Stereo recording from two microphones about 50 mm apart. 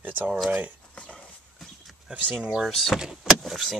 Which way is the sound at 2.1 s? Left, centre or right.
Centre.